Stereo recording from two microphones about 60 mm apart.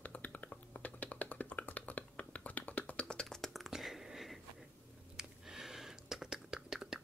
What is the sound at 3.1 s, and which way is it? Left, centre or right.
Computer keyboard, centre.